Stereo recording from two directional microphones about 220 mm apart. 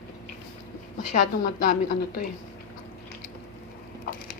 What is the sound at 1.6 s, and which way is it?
Speech, 40° left (ahead or behind).